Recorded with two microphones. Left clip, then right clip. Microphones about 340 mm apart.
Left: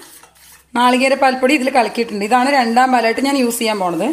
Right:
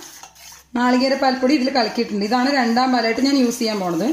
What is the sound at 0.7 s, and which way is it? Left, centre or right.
A woman's voice, left.